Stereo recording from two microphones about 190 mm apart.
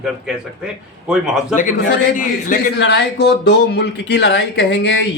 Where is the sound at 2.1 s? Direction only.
45° left (ahead or behind).